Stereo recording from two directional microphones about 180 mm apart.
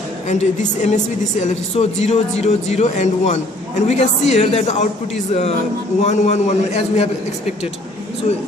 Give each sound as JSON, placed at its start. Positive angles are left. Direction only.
{"t": 0.3, "sound": "speech", "side_deg": 40}